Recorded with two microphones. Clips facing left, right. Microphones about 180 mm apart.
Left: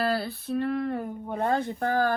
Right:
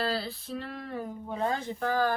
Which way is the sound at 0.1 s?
55° left (ahead or behind).